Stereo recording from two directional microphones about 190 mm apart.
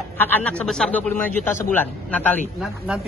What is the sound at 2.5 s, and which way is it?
Speech, centre (ahead or behind).